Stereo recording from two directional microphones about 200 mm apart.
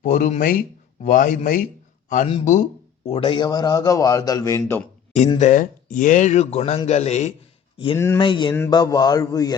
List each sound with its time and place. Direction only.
0.0 s a man's voice: 40° left (ahead or behind)
3.1 s a man's voice: 25° left (ahead or behind)
5.4 s speech: 40° left (ahead or behind)
7.9 s speech: 10° left (ahead or behind)
8.2 s a man's voice: 25° left (ahead or behind)